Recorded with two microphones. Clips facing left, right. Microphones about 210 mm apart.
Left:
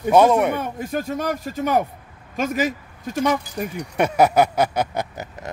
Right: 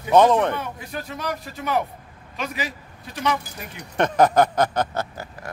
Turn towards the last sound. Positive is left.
turn(degrees=20)  # may be behind; listen again after turning